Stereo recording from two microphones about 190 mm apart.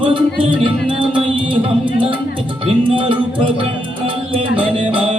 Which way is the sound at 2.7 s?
30° right (ahead or behind).